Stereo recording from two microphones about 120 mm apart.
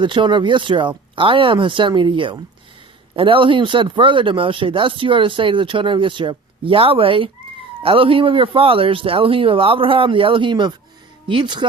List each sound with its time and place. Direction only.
0.0 s speech: 40° right (ahead or behind)